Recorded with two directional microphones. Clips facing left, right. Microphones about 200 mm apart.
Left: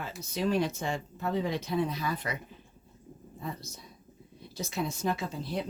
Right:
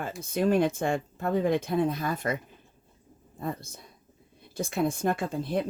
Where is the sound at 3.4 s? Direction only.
50° right (ahead or behind).